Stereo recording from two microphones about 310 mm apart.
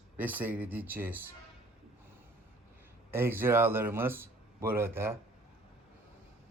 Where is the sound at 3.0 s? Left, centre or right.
Centre.